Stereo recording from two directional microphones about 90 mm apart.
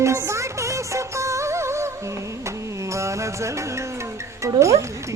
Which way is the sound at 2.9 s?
35° right (ahead or behind).